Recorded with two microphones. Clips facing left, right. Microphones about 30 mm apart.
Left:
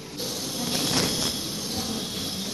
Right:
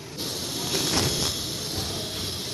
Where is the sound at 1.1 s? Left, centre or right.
Right.